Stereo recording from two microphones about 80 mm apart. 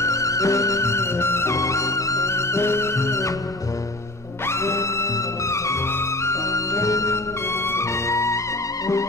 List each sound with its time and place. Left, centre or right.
0.0 s music: left
4.5 s music: left
6.2 s music: left